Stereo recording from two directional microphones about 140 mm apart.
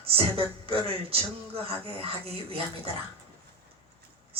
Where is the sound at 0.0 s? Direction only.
45° right (ahead or behind).